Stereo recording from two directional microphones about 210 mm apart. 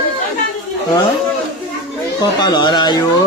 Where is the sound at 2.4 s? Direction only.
20° left (ahead or behind).